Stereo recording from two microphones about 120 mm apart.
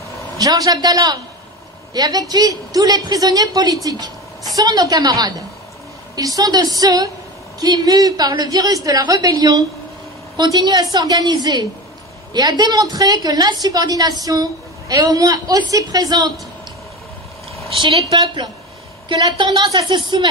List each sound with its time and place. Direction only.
0.4 s a woman's voice: 30° right (ahead or behind)
18.1 s a woman's voice: 40° right (ahead or behind)